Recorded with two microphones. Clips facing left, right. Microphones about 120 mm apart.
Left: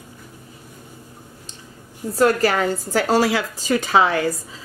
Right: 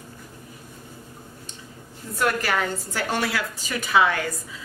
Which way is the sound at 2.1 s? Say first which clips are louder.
Left 7 dB; 35° left (ahead or behind).